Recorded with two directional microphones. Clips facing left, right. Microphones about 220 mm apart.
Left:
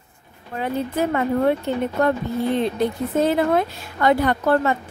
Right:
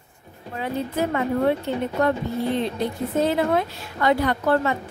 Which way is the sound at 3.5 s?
50° left (ahead or behind).